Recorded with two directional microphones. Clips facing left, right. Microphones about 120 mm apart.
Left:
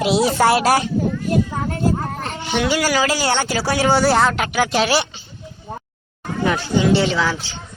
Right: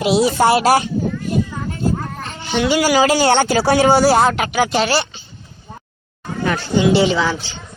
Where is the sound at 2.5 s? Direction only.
5° left (ahead or behind).